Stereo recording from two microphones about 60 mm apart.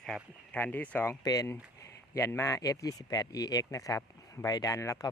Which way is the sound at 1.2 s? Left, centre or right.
Left.